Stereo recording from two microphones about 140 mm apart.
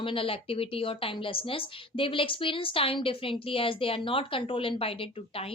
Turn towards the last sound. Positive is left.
turn(degrees=40)  # may be behind; listen again after turning